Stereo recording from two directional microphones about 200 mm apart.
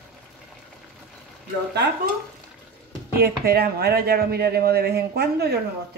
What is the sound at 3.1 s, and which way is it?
Speech, 50° right (ahead or behind).